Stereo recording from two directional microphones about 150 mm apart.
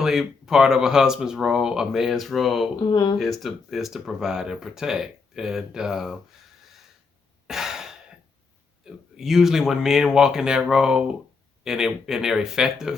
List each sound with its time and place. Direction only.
0.0 s speech: centre (ahead or behind)
2.9 s speech: 25° left (ahead or behind)
3.2 s speech: centre (ahead or behind)
7.4 s sigh: 5° right (ahead or behind)
8.8 s speech: 5° right (ahead or behind)